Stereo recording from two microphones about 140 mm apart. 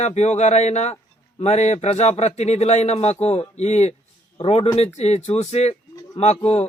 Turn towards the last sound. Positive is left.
turn(degrees=50)  # may be behind; listen again after turning